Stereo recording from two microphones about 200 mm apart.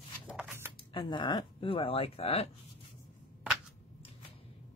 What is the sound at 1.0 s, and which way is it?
Speech, 25° left (ahead or behind).